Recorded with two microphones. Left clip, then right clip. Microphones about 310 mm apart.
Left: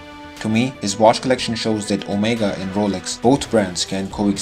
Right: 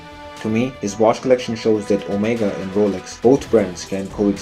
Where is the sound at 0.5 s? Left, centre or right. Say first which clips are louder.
Left 1 dB; left.